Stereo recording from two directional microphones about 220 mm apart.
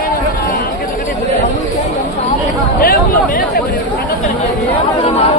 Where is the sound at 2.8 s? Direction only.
40° left (ahead or behind).